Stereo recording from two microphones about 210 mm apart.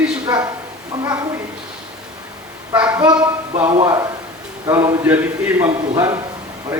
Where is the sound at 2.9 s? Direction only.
20° right (ahead or behind).